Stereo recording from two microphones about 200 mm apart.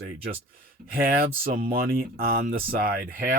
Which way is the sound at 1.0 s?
45° right (ahead or behind).